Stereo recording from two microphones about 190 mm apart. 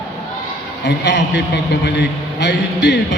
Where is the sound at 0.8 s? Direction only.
65° left (ahead or behind).